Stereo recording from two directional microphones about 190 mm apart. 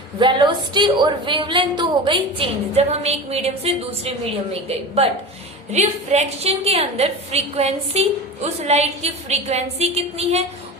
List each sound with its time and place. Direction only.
0.2 s a woman's voice: 25° right (ahead or behind)
5.7 s a woman's voice: 35° right (ahead or behind)